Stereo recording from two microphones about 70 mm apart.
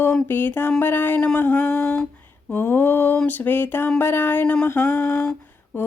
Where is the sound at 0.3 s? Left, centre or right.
Left.